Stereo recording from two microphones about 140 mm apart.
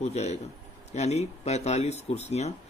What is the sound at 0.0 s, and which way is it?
Speech, 50° left (ahead or behind).